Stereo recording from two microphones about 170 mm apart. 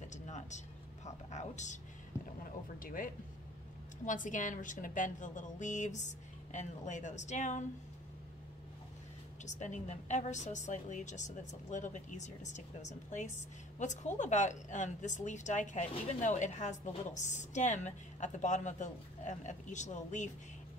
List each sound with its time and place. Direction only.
0.1 s vehicle: 45° left (ahead or behind)
1.0 s music: 45° left (ahead or behind)
2.4 s boat: 55° left (ahead or behind)
4.0 s a woman's voice: 50° left (ahead or behind)
9.4 s a woman's voice: 45° left (ahead or behind)